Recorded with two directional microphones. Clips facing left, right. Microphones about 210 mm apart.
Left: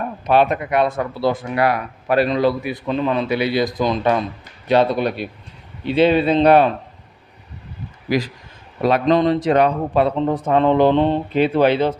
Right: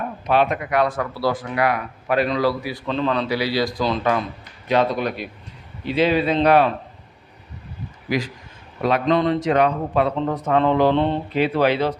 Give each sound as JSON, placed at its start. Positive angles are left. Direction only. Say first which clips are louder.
{"t": 0.3, "sound": "speech", "louder": "left 3 dB", "side_deg": 35}
{"t": 0.7, "sound": "speech", "louder": "left 2 dB", "side_deg": 25}
{"t": 2.3, "sound": "speech", "louder": "left 3 dB", "side_deg": 20}
{"t": 2.9, "sound": "a man's voice", "louder": "left 2 dB", "side_deg": 10}
{"t": 3.2, "sound": "speech", "louder": "left 3 dB", "side_deg": 20}
{"t": 4.7, "sound": "speech", "louder": "left 3 dB", "side_deg": 30}
{"t": 8.8, "sound": "speech", "louder": "left 3 dB", "side_deg": 35}